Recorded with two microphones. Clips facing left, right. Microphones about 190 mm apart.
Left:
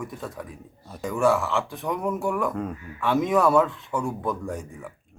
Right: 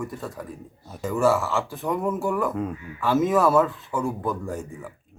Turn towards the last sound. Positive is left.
turn(degrees=0)  # may be behind; listen again after turning